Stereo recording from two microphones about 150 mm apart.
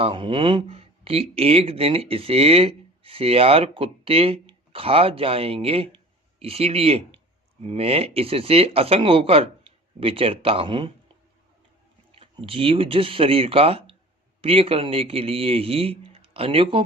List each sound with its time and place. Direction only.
0.0 s speech: 35° right (ahead or behind)
12.1 s speech: 35° right (ahead or behind)